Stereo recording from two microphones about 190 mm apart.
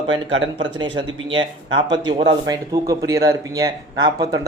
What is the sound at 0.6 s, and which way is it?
Speech, 25° right (ahead or behind).